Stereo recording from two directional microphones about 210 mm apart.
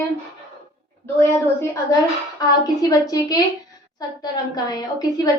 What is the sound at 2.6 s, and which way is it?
A woman's voice, 15° left (ahead or behind).